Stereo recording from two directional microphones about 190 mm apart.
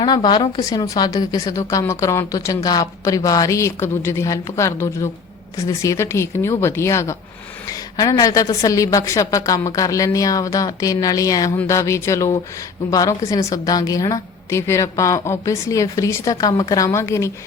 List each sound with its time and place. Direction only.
0.0 s a woman's voice: 25° left (ahead or behind)